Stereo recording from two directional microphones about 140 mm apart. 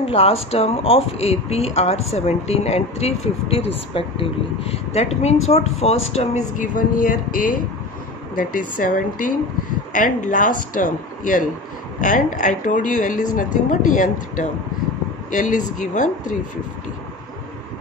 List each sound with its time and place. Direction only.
0.0 s a man's voice: 45° left (ahead or behind); by 16.3 s 65° left (ahead or behind)